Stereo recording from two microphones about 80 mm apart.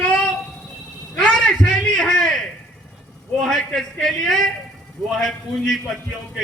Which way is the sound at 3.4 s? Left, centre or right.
Centre.